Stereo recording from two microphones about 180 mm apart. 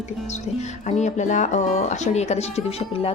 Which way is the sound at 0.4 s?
40° left (ahead or behind).